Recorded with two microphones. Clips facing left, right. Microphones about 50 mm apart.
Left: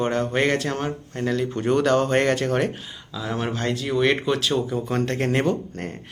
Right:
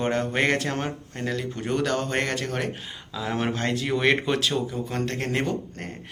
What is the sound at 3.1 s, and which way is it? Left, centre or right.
Speech, centre.